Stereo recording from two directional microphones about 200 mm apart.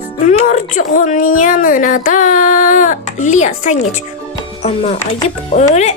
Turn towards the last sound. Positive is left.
turn(degrees=35)  # may be behind; listen again after turning